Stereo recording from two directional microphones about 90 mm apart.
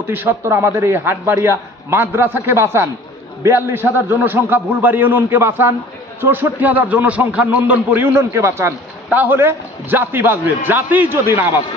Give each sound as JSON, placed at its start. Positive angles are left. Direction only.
{"t": 0.0, "sound": "a man's voice", "side_deg": -25}